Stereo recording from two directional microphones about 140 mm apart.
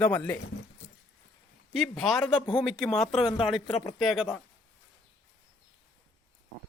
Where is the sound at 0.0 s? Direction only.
10° left (ahead or behind).